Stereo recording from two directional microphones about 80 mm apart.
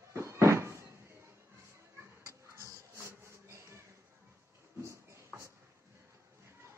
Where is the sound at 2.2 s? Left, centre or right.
Right.